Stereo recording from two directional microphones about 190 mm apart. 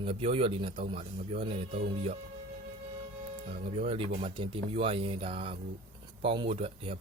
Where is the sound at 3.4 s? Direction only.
30° right (ahead or behind).